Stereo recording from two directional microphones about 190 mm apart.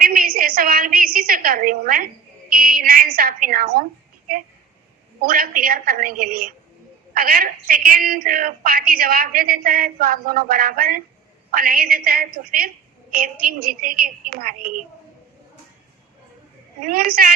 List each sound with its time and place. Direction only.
0.0 s a woman's voice: 50° right (ahead or behind)
5.2 s a woman's voice: 50° right (ahead or behind)
16.8 s a woman's voice: 50° right (ahead or behind)